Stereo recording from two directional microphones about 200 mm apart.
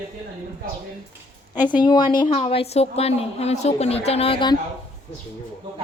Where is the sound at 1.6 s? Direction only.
20° left (ahead or behind).